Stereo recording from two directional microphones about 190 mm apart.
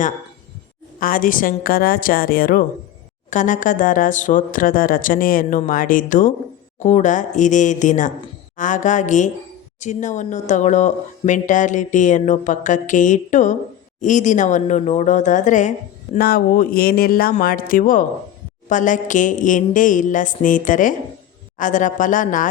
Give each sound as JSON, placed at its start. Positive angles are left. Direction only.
{"t": 0.9, "sound": "speech", "side_deg": 45}
{"t": 16.1, "sound": "speech", "side_deg": 50}